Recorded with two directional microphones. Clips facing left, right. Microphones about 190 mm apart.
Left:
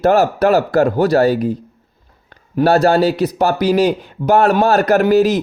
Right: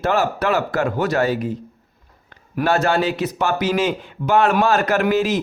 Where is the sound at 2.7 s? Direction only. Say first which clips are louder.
Left 6 dB; 35° left (ahead or behind).